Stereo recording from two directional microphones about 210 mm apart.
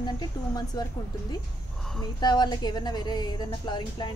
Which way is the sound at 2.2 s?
20° left (ahead or behind).